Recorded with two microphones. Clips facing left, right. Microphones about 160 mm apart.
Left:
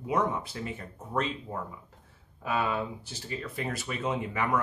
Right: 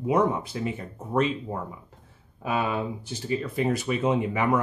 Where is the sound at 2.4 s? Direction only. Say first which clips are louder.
Right 3 dB; 20° right (ahead or behind).